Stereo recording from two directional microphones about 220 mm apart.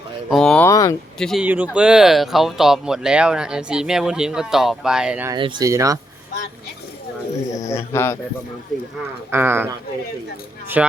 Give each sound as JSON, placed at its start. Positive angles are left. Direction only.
{"t": 0.3, "sound": "speech", "side_deg": 0}
{"t": 0.7, "sound": "speech", "side_deg": 15}
{"t": 1.2, "sound": "speech", "side_deg": 0}
{"t": 5.3, "sound": "speech", "side_deg": -20}
{"t": 7.5, "sound": "speech", "side_deg": 15}
{"t": 9.3, "sound": "speech", "side_deg": -10}
{"t": 10.8, "sound": "speech", "side_deg": -5}